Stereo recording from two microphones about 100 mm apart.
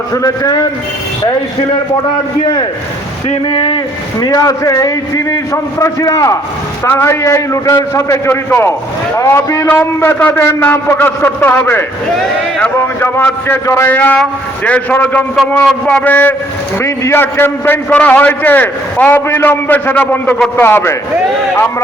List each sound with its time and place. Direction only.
0.1 s a man's voice: 35° left (ahead or behind)
4.2 s a man's voice: 35° left (ahead or behind)
6.8 s a man's voice: 25° left (ahead or behind)